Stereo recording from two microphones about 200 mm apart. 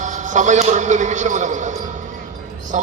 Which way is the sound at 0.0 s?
40° right (ahead or behind).